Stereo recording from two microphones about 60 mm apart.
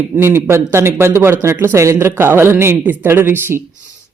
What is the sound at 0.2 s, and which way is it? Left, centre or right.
A woman's voice, right.